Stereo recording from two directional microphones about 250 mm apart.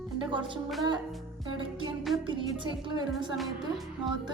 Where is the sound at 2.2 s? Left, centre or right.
Centre.